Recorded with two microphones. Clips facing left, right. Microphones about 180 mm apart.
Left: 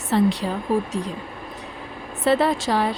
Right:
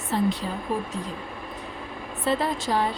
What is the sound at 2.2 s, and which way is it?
Speech, 75° left (ahead or behind).